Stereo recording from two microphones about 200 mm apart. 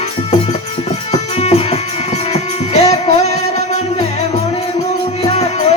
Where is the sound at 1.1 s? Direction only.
30° left (ahead or behind).